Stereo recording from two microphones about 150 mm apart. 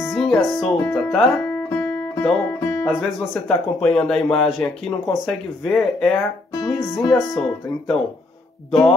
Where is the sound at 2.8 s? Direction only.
5° right (ahead or behind).